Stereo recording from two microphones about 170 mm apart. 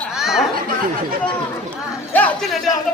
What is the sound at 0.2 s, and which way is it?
Chatter, centre (ahead or behind).